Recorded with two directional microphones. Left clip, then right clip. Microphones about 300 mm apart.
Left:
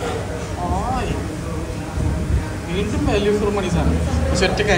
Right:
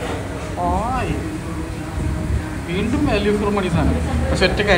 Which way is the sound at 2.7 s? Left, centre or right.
Centre.